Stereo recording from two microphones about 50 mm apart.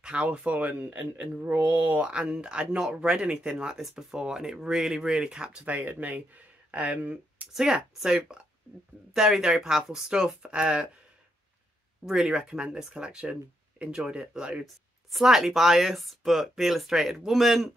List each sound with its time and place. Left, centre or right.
0.0 s speech: right
0.5 s speech: right; by 5.6 s centre
5.7 s speech: right
7.5 s speech: centre
12.1 s speech: centre
14.6 s speech: centre